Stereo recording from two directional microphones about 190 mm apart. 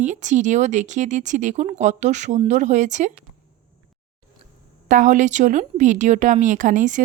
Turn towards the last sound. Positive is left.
turn(degrees=-40)  # may be behind; listen again after turning